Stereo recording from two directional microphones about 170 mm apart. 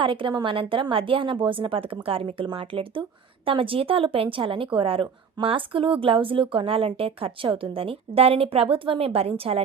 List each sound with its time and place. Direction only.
0.0 s speech: 30° right (ahead or behind)